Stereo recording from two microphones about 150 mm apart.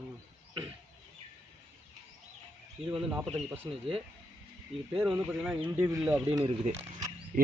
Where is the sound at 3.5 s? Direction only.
10° right (ahead or behind).